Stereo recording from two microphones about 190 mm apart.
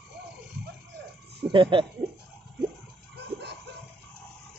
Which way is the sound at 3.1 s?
60° right (ahead or behind).